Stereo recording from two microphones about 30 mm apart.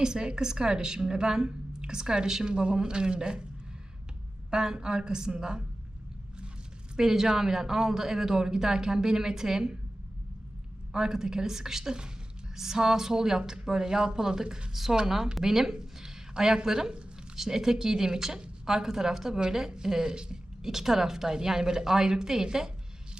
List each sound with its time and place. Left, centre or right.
0.0 s speech: right
2.5 s a man's voice: right
4.5 s speech: right
6.9 s speech: centre
10.9 s a woman's voice: centre
15.4 s a sound: centre
16.6 s a woman's voice: right
20.6 s a woman's voice: centre